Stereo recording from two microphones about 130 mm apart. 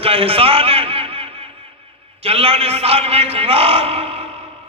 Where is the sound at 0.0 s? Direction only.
45° right (ahead or behind).